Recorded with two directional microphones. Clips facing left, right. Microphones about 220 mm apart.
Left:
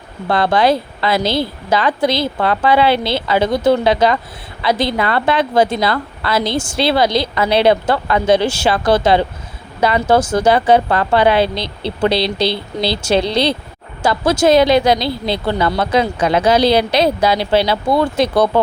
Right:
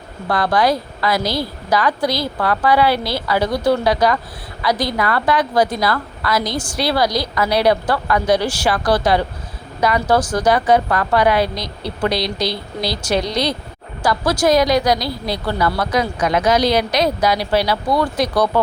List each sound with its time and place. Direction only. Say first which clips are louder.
0.3 s a woman's voice: left 3 dB; 25° left (ahead or behind)